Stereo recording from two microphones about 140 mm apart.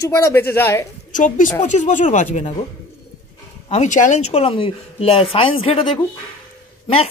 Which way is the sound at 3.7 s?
60° left (ahead or behind).